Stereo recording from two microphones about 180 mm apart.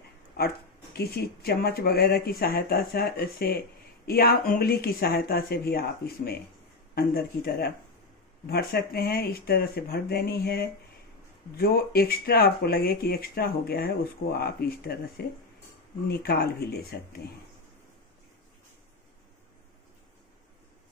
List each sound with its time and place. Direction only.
0.9 s speech: 60° left (ahead or behind)